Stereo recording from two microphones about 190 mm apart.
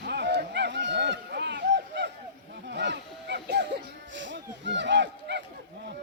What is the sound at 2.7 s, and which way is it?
Music, 65° right (ahead or behind).